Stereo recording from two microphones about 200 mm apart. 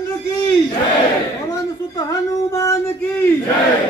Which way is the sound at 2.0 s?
15° left (ahead or behind).